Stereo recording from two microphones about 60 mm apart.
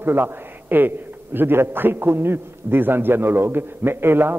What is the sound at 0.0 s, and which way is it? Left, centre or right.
A man's voice, right.